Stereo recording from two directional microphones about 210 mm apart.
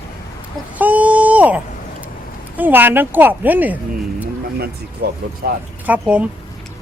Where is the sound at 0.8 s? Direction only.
5° right (ahead or behind).